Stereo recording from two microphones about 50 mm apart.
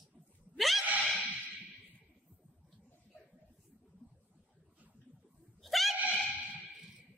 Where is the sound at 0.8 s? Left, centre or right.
Right.